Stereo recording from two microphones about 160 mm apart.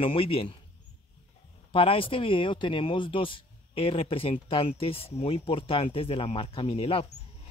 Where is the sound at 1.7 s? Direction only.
35° left (ahead or behind).